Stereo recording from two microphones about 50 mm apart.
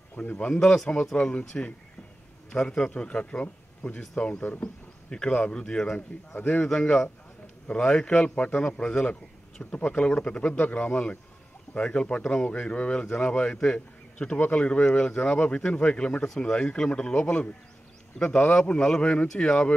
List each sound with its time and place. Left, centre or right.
0.1 s speech: left
0.6 s a man's voice: centre
5.9 s a man's voice: left
6.6 s speech: centre
18.5 s a man's voice: centre